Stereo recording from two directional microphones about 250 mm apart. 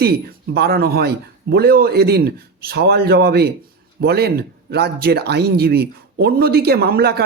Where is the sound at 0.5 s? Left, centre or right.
Right.